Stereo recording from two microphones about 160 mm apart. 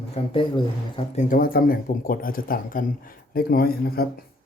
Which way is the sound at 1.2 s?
60° left (ahead or behind).